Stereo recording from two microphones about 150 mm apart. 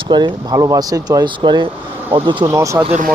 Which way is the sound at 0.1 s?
30° right (ahead or behind).